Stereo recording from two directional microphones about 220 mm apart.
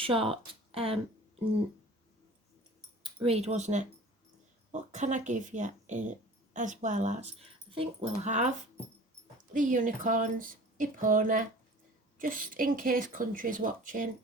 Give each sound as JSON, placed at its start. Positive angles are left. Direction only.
{"t": 0.0, "sound": "speech", "side_deg": -25}
{"t": 3.2, "sound": "speech", "side_deg": -30}